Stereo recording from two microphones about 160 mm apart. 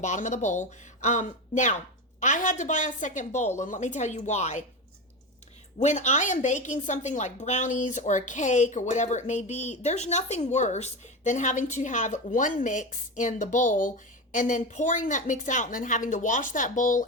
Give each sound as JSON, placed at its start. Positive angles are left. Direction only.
{"t": 0.0, "sound": "a woman's voice", "side_deg": 50}
{"t": 5.8, "sound": "a woman's voice", "side_deg": 50}